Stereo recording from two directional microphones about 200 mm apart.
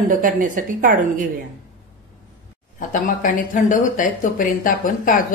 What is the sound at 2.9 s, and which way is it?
Speech, 40° left (ahead or behind).